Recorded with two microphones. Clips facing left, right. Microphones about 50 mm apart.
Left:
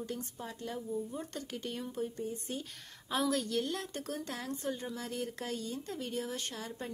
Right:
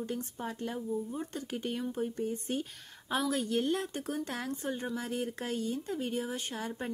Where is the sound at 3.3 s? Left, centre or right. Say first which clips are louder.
Right 3 dB; right.